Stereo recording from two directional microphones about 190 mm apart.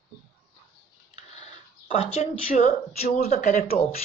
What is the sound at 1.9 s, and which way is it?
Speech, 30° left (ahead or behind).